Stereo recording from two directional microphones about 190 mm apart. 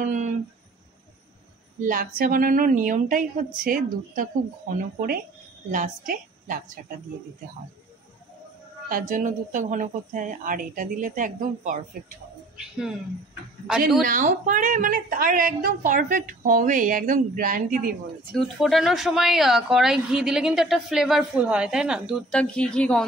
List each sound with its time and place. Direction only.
0.0 s a sound: 40° right (ahead or behind)
1.8 s a woman's voice: 45° right (ahead or behind)
5.7 s a woman's voice: 45° right (ahead or behind)
9.1 s a woman's voice: 40° right (ahead or behind)
12.5 s speech: 5° right (ahead or behind)
14.0 s a woman's voice: 45° right (ahead or behind)
18.3 s speech: centre (ahead or behind)